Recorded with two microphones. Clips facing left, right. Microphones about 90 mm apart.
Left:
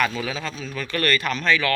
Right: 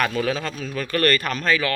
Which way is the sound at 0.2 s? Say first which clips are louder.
Right 5 dB; 45° right (ahead or behind).